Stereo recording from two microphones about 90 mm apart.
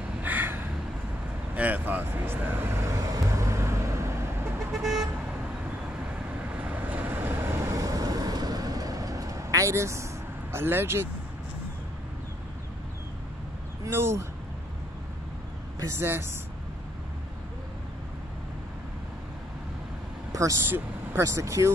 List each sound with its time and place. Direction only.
0.2 s a sound: 20° right (ahead or behind)
1.5 s vehicle: 20° right (ahead or behind)
6.5 s vehicle: 15° right (ahead or behind); by 10.0 s 35° right (ahead or behind)
10.5 s speech: 25° right (ahead or behind)
13.8 s speech: 30° right (ahead or behind)
16.0 s speech: 25° right (ahead or behind)
20.6 s speech: 25° right (ahead or behind)
21.3 s speech: 35° right (ahead or behind)